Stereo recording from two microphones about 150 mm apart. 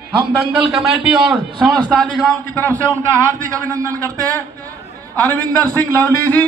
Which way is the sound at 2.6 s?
20° right (ahead or behind).